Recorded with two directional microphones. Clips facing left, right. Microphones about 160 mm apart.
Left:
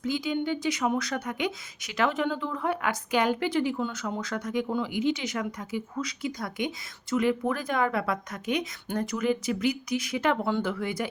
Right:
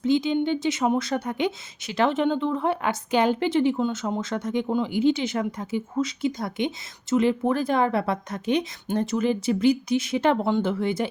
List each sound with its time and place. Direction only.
0.0 s speech: 25° right (ahead or behind)